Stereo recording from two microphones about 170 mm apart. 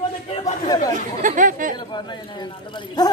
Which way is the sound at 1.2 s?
50° right (ahead or behind).